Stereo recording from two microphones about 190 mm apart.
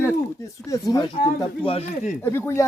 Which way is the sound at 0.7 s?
20° left (ahead or behind).